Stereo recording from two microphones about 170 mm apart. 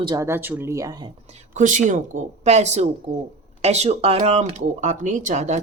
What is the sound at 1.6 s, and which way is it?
Speech, 50° right (ahead or behind).